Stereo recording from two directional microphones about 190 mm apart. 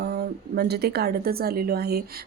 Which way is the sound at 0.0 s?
60° right (ahead or behind).